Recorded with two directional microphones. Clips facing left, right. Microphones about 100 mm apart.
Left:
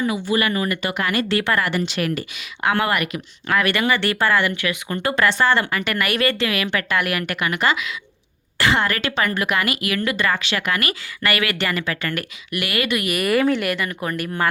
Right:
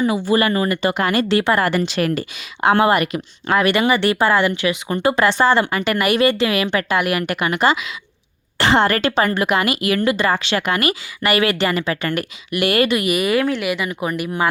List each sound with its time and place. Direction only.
0.0 s speech: 30° right (ahead or behind)
1.6 s speech: 40° right (ahead or behind)
13.1 s speech: 5° right (ahead or behind)